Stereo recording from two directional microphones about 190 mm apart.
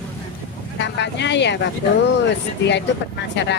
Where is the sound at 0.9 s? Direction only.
65° left (ahead or behind).